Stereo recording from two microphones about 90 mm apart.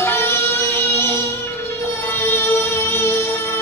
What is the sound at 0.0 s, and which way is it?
Music, 25° left (ahead or behind).